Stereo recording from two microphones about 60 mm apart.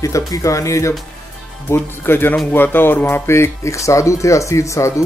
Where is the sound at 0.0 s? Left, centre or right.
Left.